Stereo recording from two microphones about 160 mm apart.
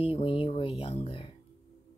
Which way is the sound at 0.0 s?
35° left (ahead or behind).